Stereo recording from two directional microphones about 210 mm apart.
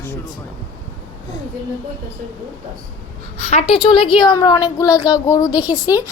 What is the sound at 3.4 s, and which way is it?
A woman's voice, 30° left (ahead or behind).